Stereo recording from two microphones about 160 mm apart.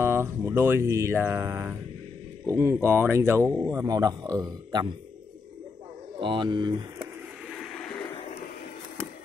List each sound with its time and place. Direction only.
0.0 s music: 15° right (ahead or behind)
3.6 s a man's voice: 20° right (ahead or behind)
6.2 s speech: 30° right (ahead or behind)
7.5 s a sound: centre (ahead or behind)